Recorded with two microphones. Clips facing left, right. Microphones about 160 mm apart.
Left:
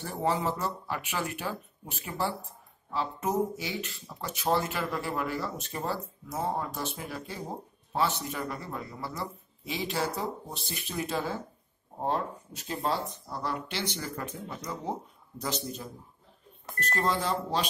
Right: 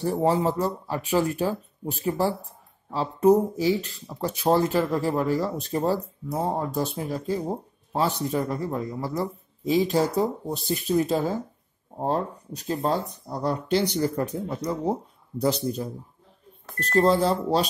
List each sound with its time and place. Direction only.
0.0 s speech: 35° right (ahead or behind)